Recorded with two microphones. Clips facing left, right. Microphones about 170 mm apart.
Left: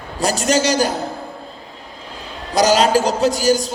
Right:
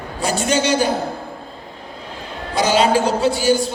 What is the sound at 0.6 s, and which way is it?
Speech, 40° left (ahead or behind).